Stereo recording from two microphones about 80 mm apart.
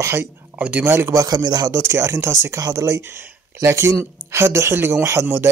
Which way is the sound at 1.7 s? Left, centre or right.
Right.